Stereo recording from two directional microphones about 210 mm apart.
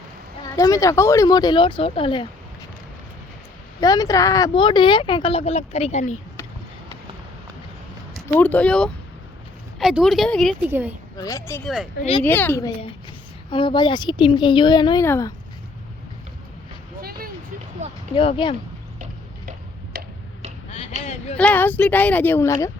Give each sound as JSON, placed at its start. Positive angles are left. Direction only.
{"t": 0.4, "sound": "speech", "side_deg": 15}
{"t": 3.8, "sound": "speech", "side_deg": 15}
{"t": 8.4, "sound": "speech", "side_deg": 5}
{"t": 10.7, "sound": "speech", "side_deg": -10}
{"t": 11.2, "sound": "speech", "side_deg": 15}
{"t": 11.6, "sound": "speech", "side_deg": 0}
{"t": 12.2, "sound": "speech", "side_deg": 10}
{"t": 13.5, "sound": "speech", "side_deg": 25}
{"t": 17.0, "sound": "vehicle", "side_deg": -45}
{"t": 18.1, "sound": "speech", "side_deg": 25}
{"t": 19.5, "sound": "tick-tock", "side_deg": -45}
{"t": 21.3, "sound": "speech", "side_deg": 10}